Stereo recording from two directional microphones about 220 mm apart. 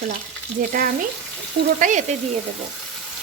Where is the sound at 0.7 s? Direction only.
40° right (ahead or behind).